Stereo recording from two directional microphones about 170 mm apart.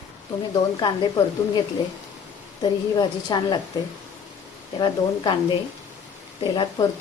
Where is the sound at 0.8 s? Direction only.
25° left (ahead or behind).